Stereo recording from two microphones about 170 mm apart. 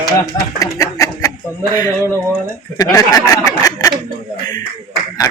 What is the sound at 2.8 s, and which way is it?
A man's voice, 20° left (ahead or behind).